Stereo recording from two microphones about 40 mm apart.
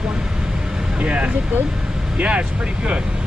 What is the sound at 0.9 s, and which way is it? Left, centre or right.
Speech, right.